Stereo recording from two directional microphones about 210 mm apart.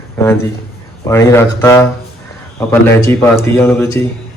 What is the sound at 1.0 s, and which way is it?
A man's voice, 15° left (ahead or behind).